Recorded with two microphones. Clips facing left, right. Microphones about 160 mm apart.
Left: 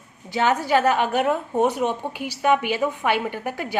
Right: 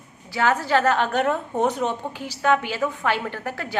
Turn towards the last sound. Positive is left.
turn(degrees=15)  # may be behind; listen again after turning